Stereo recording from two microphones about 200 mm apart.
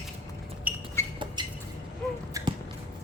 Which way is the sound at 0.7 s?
10° right (ahead or behind).